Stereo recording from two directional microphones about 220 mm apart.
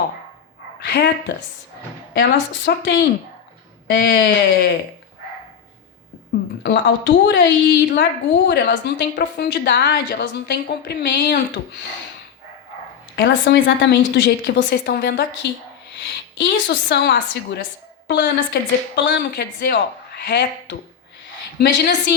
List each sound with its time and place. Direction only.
0.8 s a woman's voice: 50° left (ahead or behind)
2.1 s a woman's voice: 45° left (ahead or behind)
6.6 s a woman's voice: 50° left (ahead or behind)
13.1 s a woman's voice: 45° left (ahead or behind)